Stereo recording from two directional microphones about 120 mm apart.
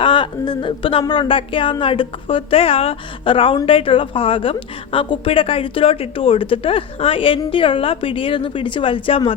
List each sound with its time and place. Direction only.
0.0 s a woman's voice: 45° left (ahead or behind)